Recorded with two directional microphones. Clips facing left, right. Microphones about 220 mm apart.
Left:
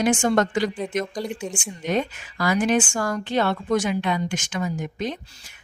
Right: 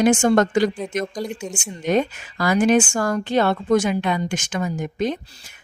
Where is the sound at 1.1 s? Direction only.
Centre (ahead or behind).